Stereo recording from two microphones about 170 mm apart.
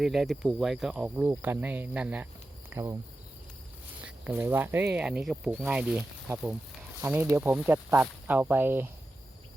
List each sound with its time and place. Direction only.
0.0 s speech: centre (ahead or behind); by 3.0 s 15° right (ahead or behind)
4.0 s speech: 10° right (ahead or behind)